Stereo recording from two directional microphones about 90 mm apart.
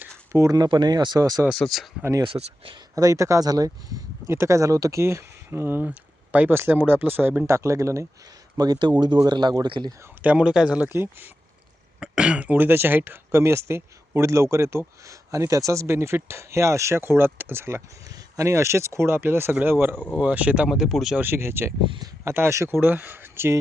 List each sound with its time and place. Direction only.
0.3 s speech: 40° right (ahead or behind)
1.2 s speech: 35° right (ahead or behind)
1.5 s speech: centre (ahead or behind)
2.2 s speech: 75° right (ahead or behind)
2.9 s speech: 40° right (ahead or behind)
4.3 s speech: 30° right (ahead or behind)
8.5 s speech: 45° right (ahead or behind)
10.2 s speech: 10° right (ahead or behind)
11.9 s speech: 10° right (ahead or behind)
20.7 s speech: 5° right (ahead or behind)
21.2 s speech: 25° right (ahead or behind)